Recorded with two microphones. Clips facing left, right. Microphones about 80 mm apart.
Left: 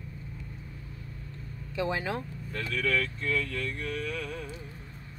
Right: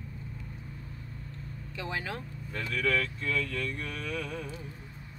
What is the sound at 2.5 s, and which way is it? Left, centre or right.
Speech, centre.